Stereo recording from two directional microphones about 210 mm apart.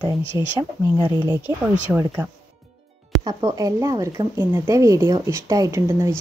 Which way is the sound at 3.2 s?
20° right (ahead or behind).